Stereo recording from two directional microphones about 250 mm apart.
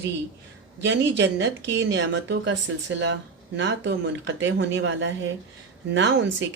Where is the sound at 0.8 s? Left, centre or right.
Right.